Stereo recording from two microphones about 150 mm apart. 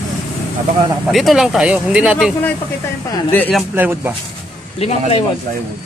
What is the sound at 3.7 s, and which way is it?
Speech, 15° right (ahead or behind).